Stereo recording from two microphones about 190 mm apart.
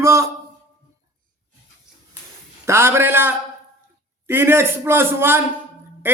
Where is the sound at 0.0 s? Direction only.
15° right (ahead or behind).